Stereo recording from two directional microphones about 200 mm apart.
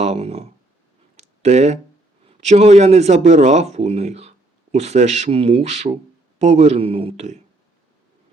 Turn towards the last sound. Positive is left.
turn(degrees=-30)  # may be behind; listen again after turning